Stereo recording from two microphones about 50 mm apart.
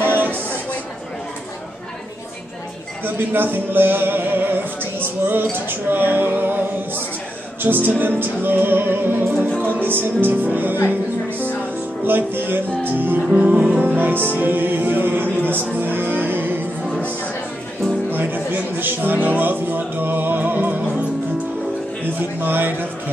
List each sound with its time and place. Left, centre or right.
0.0 s a sound: right
3.0 s music: right
10.9 s speech: right
12.0 s music: right
18.1 s music: right
22.4 s music: right